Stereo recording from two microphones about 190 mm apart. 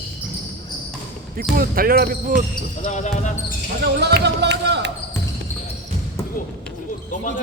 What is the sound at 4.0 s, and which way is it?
Speech, 60° right (ahead or behind).